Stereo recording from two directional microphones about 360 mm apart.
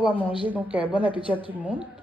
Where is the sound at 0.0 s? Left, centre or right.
Centre.